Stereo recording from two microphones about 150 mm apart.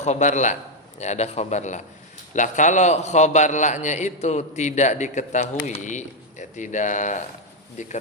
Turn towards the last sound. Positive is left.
turn(degrees=50)  # may be behind; listen again after turning